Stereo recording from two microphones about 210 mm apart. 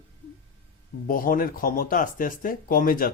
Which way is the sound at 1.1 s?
40° left (ahead or behind).